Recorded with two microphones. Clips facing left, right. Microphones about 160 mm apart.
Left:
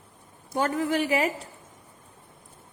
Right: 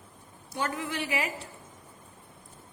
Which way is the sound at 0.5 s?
45° left (ahead or behind).